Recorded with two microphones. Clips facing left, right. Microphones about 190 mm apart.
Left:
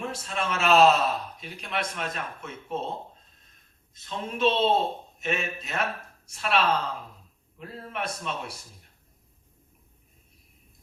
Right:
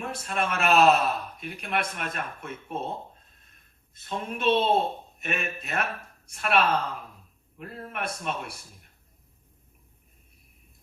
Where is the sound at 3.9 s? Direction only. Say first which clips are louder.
Left 2 dB; 55° right (ahead or behind).